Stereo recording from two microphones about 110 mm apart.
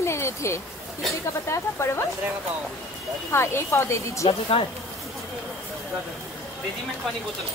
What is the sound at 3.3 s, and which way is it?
Speech, 20° left (ahead or behind).